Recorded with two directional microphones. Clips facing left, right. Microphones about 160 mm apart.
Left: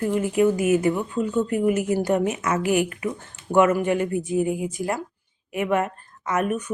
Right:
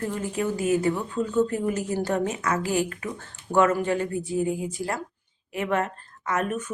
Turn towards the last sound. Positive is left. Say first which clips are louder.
# left 3 dB
turn(degrees=15)  # may be behind; listen again after turning